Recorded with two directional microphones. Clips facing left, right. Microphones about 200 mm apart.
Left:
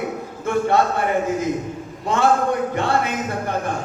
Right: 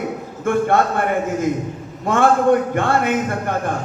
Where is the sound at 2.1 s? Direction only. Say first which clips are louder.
Right 4 dB; 55° right (ahead or behind).